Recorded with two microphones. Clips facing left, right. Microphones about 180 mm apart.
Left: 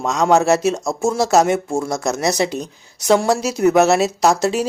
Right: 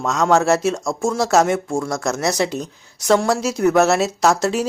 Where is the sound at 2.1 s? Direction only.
20° left (ahead or behind).